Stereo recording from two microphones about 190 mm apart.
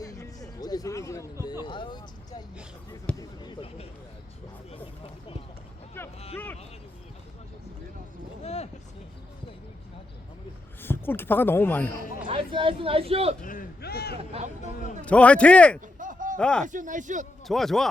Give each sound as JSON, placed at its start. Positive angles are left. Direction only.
{"t": 0.0, "sound": "music", "side_deg": 20}
{"t": 1.6, "sound": "speech", "side_deg": 25}
{"t": 6.0, "sound": "speech", "side_deg": 10}
{"t": 8.4, "sound": "speech", "side_deg": 35}
{"t": 10.8, "sound": "speech", "side_deg": 10}
{"t": 12.3, "sound": "speech", "side_deg": -30}
{"t": 13.4, "sound": "a sound", "side_deg": 45}
{"t": 14.2, "sound": "speech", "side_deg": -35}
{"t": 15.0, "sound": "speech", "side_deg": 5}
{"t": 16.0, "sound": "chop", "side_deg": -45}
{"t": 16.4, "sound": "speech", "side_deg": 5}
{"t": 16.6, "sound": "speech", "side_deg": -45}
{"t": 17.4, "sound": "speech", "side_deg": 0}